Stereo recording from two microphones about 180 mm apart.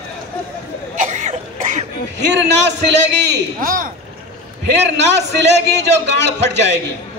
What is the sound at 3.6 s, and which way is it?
Speech, 50° right (ahead or behind).